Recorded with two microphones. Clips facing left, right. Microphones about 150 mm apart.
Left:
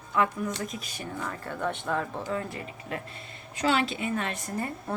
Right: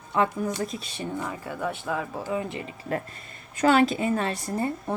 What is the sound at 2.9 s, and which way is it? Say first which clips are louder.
A woman's voice: right 8 dB; 45° right (ahead or behind).